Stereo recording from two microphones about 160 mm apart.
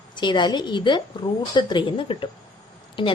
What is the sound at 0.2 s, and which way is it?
A woman's voice, 30° left (ahead or behind).